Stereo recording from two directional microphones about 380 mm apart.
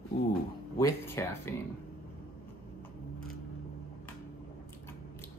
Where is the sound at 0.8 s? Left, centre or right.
Centre.